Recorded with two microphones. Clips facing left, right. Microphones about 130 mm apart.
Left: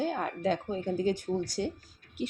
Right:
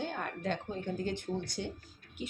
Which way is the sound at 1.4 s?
40° left (ahead or behind).